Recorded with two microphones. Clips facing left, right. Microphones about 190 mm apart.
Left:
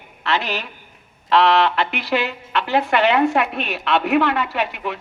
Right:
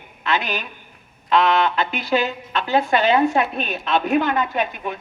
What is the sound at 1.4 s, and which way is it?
A woman's voice, 70° left (ahead or behind).